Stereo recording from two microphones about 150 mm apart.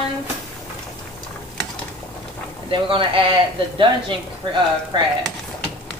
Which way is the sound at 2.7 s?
35° right (ahead or behind).